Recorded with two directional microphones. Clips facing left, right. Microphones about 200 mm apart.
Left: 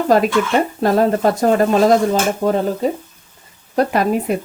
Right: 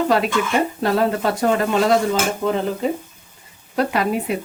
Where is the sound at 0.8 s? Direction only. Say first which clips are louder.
Left 4 dB; 40° left (ahead or behind).